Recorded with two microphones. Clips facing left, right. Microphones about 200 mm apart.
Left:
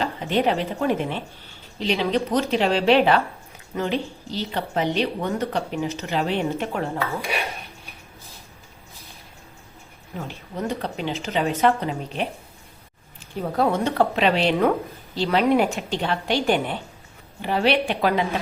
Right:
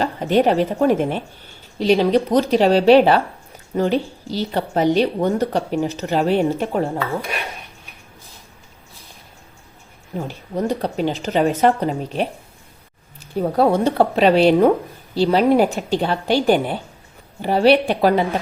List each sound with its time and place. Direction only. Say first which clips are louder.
0.0 s a woman's voice: right 5 dB; 45° right (ahead or behind)
10.2 s a woman's voice: right 7 dB; 35° right (ahead or behind)
13.6 s a woman's voice: right 4 dB; 35° right (ahead or behind)